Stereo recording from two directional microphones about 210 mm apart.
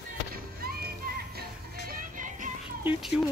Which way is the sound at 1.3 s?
45° right (ahead or behind).